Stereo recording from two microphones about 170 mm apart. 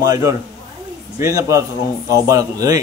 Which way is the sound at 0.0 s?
20° right (ahead or behind).